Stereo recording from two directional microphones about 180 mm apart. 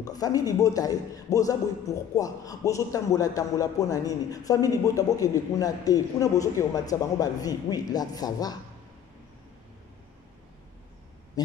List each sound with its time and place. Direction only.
0.0 s a man's voice: 20° left (ahead or behind)
11.4 s speech: 20° left (ahead or behind)